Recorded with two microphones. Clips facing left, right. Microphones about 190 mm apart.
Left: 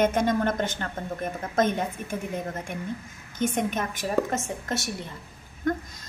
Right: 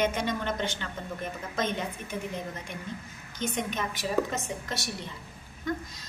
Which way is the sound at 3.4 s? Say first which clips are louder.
Left 5 dB; 50° left (ahead or behind).